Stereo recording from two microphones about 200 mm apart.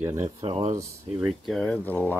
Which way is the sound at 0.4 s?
30° right (ahead or behind).